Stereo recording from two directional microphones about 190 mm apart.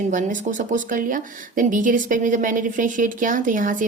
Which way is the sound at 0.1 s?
40° right (ahead or behind).